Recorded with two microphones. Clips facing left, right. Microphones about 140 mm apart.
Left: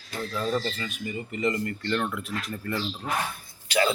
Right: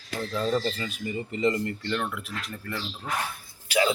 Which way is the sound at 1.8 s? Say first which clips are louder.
Left 2 dB; 5° right (ahead or behind).